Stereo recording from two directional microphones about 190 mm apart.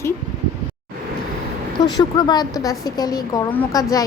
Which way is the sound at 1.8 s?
20° left (ahead or behind).